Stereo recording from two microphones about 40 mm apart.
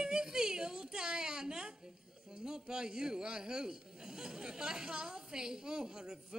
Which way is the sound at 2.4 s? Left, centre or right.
Centre.